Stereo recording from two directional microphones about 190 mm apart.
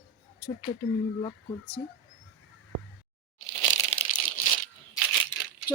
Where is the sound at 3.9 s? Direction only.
30° left (ahead or behind).